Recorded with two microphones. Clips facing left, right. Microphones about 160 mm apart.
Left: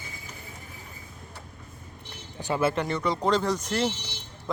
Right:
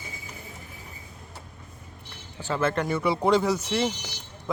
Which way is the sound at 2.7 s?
Centre (ahead or behind).